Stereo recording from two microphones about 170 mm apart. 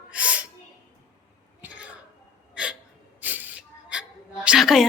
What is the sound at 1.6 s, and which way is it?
Throat clearing, 10° right (ahead or behind).